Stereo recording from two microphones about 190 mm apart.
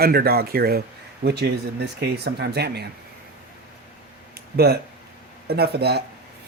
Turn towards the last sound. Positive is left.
turn(degrees=-60)  # may be behind; listen again after turning